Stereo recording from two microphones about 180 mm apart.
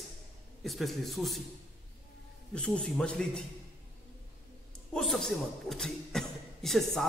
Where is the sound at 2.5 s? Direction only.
5° left (ahead or behind).